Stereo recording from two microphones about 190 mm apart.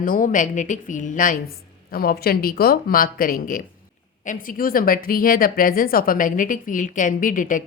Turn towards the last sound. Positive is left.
turn(degrees=45)  # may be behind; listen again after turning